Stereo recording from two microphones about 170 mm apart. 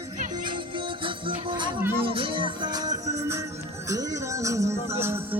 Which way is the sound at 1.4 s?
30° right (ahead or behind).